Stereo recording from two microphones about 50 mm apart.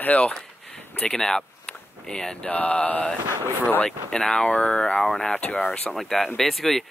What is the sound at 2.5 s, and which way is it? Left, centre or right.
Mantra, left.